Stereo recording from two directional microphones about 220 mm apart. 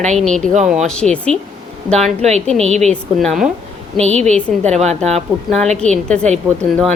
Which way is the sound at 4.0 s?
30° right (ahead or behind).